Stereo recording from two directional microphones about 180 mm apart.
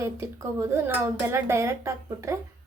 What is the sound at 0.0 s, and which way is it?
A woman's voice, 15° right (ahead or behind).